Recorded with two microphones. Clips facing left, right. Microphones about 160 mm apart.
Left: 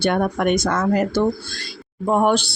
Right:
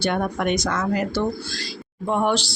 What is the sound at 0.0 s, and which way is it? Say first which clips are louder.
Speech: left 4 dB; 55° left (ahead or behind).